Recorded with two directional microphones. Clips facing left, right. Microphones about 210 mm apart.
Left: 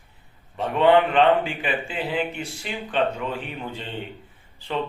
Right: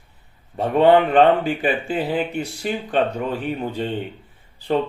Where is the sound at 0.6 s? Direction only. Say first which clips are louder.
Right 3 dB; 40° right (ahead or behind).